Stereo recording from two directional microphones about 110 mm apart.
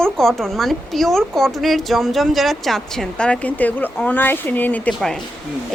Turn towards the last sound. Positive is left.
turn(degrees=5)  # may be behind; listen again after turning